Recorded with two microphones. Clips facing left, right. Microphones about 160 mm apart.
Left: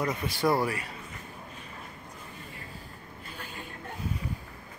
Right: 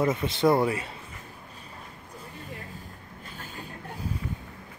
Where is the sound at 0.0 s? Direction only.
25° right (ahead or behind).